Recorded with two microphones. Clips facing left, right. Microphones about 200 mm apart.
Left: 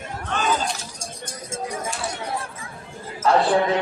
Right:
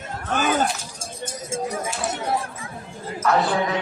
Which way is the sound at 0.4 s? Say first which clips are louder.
Right 2 dB; 60° right (ahead or behind).